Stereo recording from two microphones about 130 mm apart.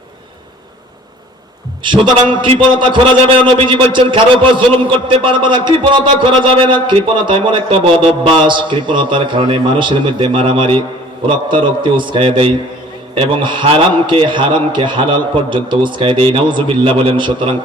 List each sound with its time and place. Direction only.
1.8 s a man's voice: 40° right (ahead or behind)